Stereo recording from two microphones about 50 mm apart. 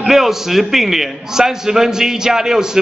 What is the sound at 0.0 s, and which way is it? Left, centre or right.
A man's voice, centre.